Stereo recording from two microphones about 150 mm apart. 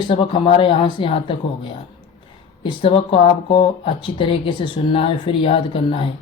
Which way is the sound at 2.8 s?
35° left (ahead or behind).